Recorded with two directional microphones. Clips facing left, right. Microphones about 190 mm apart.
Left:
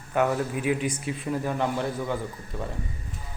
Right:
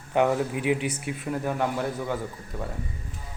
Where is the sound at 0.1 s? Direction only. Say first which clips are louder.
Right 2 dB; 20° right (ahead or behind).